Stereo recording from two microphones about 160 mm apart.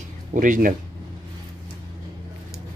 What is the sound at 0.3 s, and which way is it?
Speech, 55° right (ahead or behind).